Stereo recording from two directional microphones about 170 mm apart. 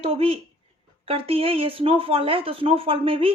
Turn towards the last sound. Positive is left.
turn(degrees=-35)  # may be behind; listen again after turning